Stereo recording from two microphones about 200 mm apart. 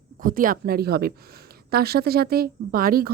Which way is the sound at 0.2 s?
45° right (ahead or behind).